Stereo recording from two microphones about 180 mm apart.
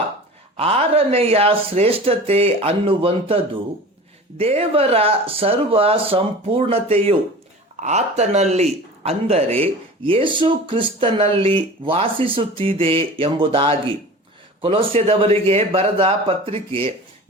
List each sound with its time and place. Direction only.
0.5 s speech: 35° right (ahead or behind)